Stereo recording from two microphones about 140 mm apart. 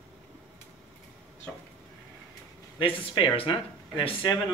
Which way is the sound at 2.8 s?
35° left (ahead or behind).